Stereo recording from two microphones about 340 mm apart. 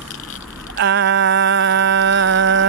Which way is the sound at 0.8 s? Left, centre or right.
Right.